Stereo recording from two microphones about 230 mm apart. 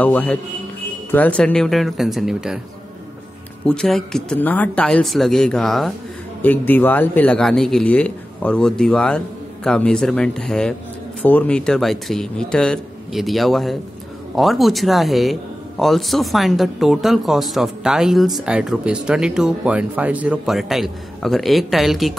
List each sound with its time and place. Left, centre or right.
0.0 s a man's voice: centre
3.6 s speech: centre